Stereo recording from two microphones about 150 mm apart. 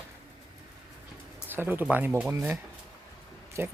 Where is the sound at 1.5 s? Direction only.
15° right (ahead or behind).